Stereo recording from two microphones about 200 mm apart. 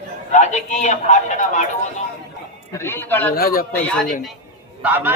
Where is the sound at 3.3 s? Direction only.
45° left (ahead or behind).